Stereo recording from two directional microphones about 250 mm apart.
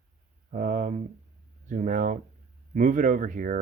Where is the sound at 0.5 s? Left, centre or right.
Right.